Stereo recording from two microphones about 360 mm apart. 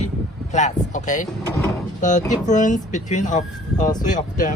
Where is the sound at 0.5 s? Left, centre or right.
Centre.